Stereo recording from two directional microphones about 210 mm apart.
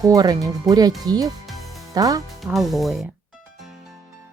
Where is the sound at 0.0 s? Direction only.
15° right (ahead or behind).